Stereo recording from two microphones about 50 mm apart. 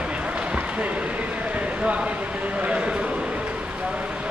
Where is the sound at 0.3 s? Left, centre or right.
Right.